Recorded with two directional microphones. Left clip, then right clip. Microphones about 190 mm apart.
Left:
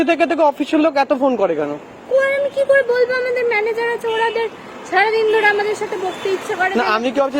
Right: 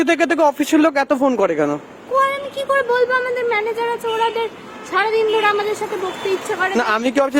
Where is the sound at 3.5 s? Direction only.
70° right (ahead or behind).